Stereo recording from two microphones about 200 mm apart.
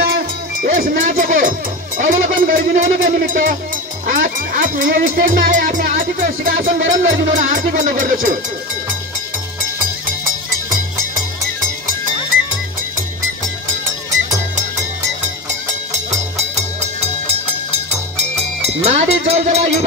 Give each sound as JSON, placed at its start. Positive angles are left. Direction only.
{"t": 0.0, "sound": "music", "side_deg": -45}
{"t": 2.0, "sound": "speech", "side_deg": -45}
{"t": 15.9, "sound": "music", "side_deg": -35}
{"t": 18.1, "sound": "music", "side_deg": -35}